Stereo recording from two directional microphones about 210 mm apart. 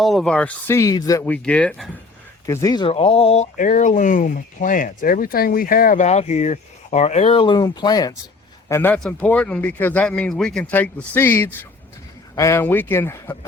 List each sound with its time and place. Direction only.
0.0 s speech: centre (ahead or behind)
2.5 s speech: 15° left (ahead or behind)
8.7 s speech: 10° left (ahead or behind)